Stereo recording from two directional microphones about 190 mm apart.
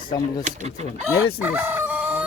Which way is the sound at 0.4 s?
35° right (ahead or behind).